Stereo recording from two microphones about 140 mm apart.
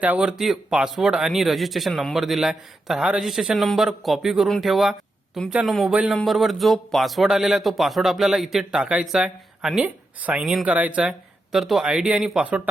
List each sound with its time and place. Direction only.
0.0 s speech: 10° right (ahead or behind)